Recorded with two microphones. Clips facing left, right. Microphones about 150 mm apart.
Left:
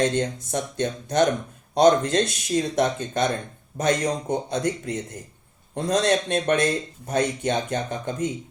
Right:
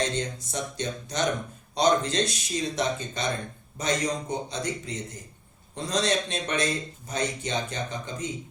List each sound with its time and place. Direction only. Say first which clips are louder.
0.0 s speech: left 6 dB; 55° left (ahead or behind)